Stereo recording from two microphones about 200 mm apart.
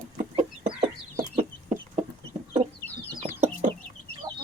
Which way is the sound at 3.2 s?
25° right (ahead or behind).